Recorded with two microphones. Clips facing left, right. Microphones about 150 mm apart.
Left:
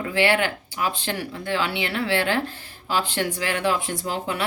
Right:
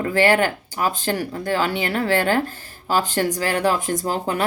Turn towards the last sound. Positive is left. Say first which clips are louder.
# right 4 dB
turn(degrees=-45)  # may be behind; listen again after turning